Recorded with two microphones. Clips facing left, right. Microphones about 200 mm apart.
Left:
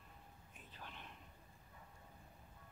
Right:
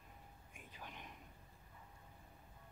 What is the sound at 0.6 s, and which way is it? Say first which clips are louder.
Whispering: right 1 dB; 10° right (ahead or behind).